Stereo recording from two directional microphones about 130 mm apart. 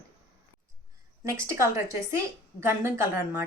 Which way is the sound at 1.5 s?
20° right (ahead or behind).